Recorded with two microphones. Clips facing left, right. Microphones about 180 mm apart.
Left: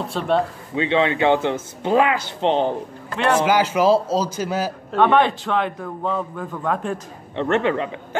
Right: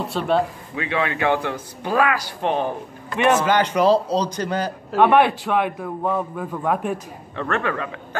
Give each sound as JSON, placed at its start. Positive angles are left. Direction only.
{"t": 0.0, "sound": "a man's voice", "side_deg": 0}
{"t": 0.7, "sound": "speech", "side_deg": 25}
{"t": 3.3, "sound": "a man's voice", "side_deg": 5}
{"t": 4.9, "sound": "a man's voice", "side_deg": -10}
{"t": 7.3, "sound": "speech", "side_deg": 25}